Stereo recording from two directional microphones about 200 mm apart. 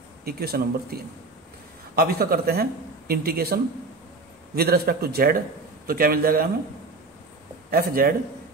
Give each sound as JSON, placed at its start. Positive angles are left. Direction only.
{"t": 0.2, "sound": "speech", "side_deg": -50}
{"t": 7.7, "sound": "speech", "side_deg": -45}